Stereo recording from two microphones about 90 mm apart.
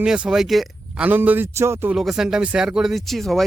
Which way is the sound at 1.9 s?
5° right (ahead or behind).